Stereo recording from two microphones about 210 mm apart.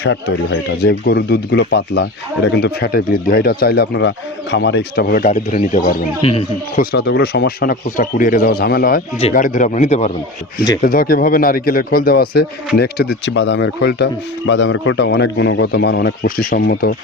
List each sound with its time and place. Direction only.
0.0 s a man's voice: 55° left (ahead or behind)
6.2 s speech: 30° left (ahead or behind)
6.9 s a man's voice: 50° left (ahead or behind)